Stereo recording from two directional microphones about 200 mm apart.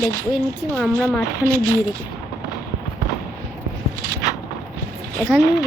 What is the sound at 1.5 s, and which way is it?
Speech, 15° right (ahead or behind).